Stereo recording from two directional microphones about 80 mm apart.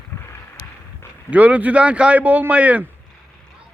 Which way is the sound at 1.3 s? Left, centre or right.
Centre.